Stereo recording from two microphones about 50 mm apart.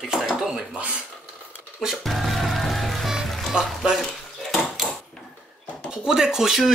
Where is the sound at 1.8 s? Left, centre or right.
Centre.